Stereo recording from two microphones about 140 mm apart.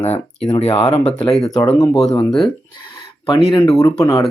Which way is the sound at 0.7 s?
50° left (ahead or behind).